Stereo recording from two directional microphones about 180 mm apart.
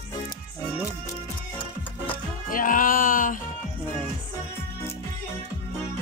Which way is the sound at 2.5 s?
50° left (ahead or behind).